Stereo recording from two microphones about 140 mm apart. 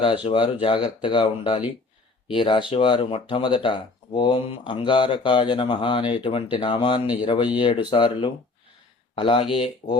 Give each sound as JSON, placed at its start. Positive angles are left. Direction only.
{"t": 0.3, "sound": "speech", "side_deg": 40}